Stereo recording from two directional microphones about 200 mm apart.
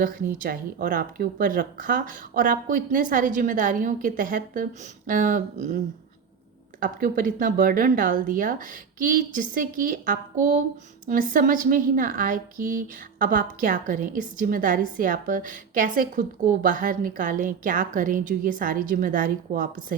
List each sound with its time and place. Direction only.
0.0 s speech: 45° right (ahead or behind)